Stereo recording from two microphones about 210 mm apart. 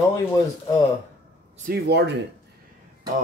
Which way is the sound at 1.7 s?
55° right (ahead or behind).